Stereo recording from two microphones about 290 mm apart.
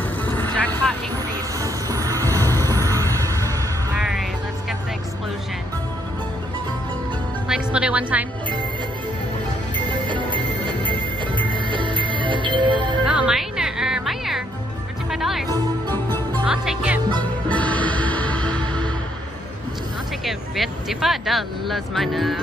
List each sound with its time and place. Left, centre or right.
0.2 s vehicle: centre
1.1 s music: centre
2.3 s a sound: centre
4.1 s music: centre
7.4 s music: centre
10.0 s music: centre
13.0 s music: centre
16.4 s music: centre
20.2 s vehicle: centre